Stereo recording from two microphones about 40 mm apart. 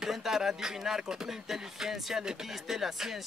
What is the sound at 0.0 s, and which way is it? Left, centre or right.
Speech, centre.